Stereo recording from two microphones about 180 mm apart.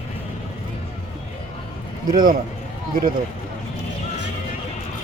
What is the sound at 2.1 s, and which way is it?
Speech, 50° right (ahead or behind).